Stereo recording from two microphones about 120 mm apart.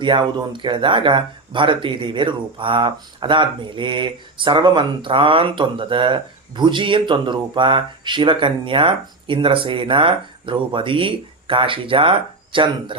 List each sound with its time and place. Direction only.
0.0 s speech: 40° right (ahead or behind)